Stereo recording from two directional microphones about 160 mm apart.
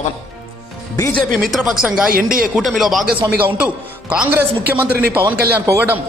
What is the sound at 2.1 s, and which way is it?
Speech, 60° right (ahead or behind).